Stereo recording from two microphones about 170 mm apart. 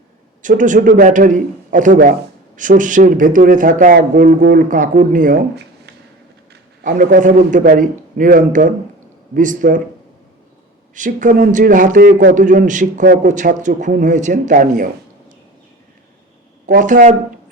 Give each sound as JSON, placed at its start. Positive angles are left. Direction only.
{"t": 0.4, "sound": "a man's voice", "side_deg": -50}
{"t": 6.8, "sound": "a man's voice", "side_deg": -50}
{"t": 10.9, "sound": "a man's voice", "side_deg": -50}
{"t": 16.6, "sound": "a man's voice", "side_deg": -50}